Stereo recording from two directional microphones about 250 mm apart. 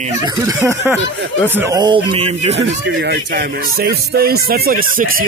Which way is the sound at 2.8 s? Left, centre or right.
Right.